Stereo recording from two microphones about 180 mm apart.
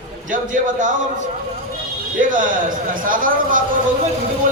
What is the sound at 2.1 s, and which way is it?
A man's voice, 45° right (ahead or behind).